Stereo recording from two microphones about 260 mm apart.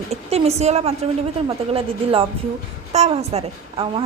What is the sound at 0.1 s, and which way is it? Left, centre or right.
A woman's voice, right.